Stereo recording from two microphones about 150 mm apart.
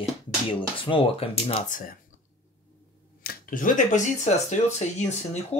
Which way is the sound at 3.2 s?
80° left.